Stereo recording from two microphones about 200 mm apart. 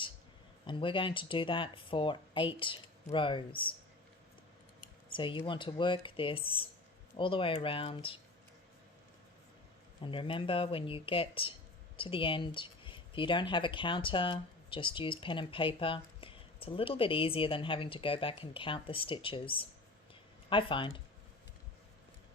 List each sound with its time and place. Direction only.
0.6 s speech: 25° left (ahead or behind)
5.1 s speech: 25° left (ahead or behind)
10.0 s speech: 25° left (ahead or behind)